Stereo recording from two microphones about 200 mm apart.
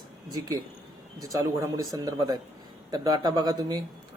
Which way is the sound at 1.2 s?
15° right (ahead or behind).